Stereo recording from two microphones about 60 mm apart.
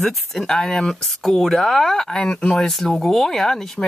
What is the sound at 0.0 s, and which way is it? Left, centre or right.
Speech, centre.